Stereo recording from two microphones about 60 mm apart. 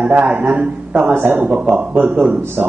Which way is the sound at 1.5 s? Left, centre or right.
Centre.